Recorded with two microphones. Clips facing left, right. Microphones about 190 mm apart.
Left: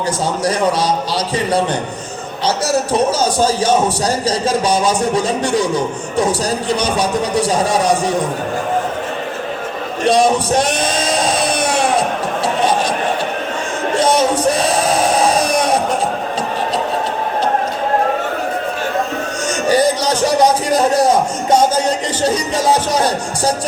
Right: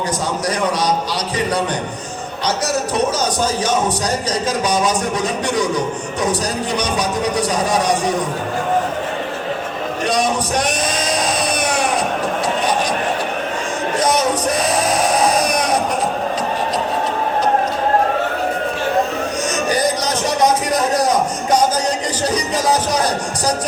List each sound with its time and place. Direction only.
3.2 s a man's voice: 30° left (ahead or behind)
7.4 s a man's voice: 30° left (ahead or behind)
10.1 s a man's voice: 30° left (ahead or behind)
11.6 s music: 30° left (ahead or behind)
13.9 s a sound: 30° left (ahead or behind)
19.6 s music: 30° left (ahead or behind)